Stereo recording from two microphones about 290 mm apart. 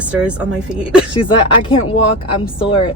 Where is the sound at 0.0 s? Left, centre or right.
Centre.